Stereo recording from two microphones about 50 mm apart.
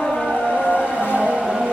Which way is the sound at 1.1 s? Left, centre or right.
Right.